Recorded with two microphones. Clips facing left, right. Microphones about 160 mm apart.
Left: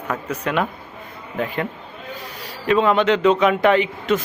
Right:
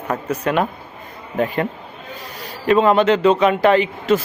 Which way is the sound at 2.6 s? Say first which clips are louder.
Right 3 dB; 40° right (ahead or behind).